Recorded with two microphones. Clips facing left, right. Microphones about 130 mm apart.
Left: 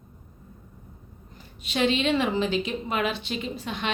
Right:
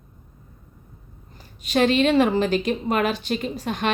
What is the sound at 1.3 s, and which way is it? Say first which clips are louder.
A woman's voice: right 6 dB; 40° right (ahead or behind).